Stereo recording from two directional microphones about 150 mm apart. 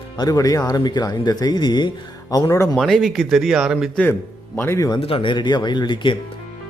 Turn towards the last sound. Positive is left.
turn(degrees=30)  # may be behind; listen again after turning